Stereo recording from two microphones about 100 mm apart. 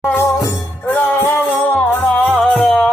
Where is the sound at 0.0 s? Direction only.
20° left (ahead or behind).